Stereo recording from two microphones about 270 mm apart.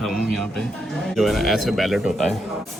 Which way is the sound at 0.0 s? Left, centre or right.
Centre.